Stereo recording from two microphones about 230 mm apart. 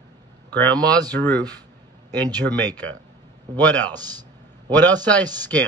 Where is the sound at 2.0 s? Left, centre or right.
Centre.